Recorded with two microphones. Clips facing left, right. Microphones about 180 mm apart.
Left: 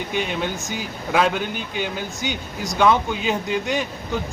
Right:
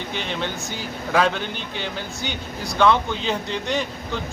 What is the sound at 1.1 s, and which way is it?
A man's voice, 10° left (ahead or behind).